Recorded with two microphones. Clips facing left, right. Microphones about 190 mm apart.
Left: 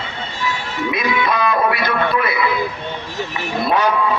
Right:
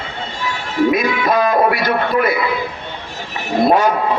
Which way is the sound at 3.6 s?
45° right (ahead or behind).